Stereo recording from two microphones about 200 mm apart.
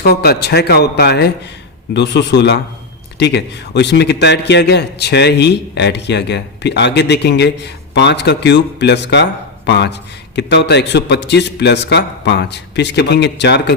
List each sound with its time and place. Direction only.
0.0 s a man's voice: 50° left (ahead or behind)